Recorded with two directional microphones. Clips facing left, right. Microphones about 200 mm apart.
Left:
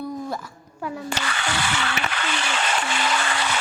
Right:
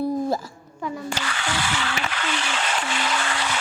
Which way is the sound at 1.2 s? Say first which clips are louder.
Left 1 dB; 65° left (ahead or behind).